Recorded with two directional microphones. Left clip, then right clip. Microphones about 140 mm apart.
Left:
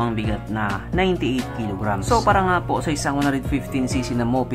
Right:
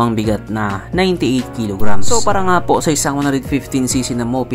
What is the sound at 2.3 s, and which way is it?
Speech, 70° right (ahead or behind).